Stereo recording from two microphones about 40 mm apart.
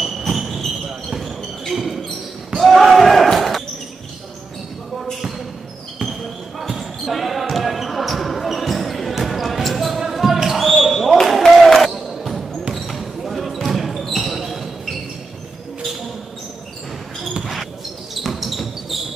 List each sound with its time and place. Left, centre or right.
0.0 s a sound: centre
0.8 s basketball bounce: centre
6.8 s basketball bounce: centre
18.1 s basketball bounce: centre